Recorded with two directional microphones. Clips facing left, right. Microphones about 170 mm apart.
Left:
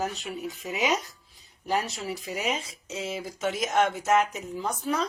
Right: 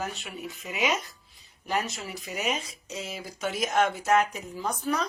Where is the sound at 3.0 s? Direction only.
25° left (ahead or behind).